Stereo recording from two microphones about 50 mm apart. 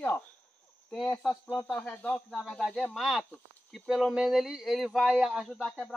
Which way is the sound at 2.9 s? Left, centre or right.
Centre.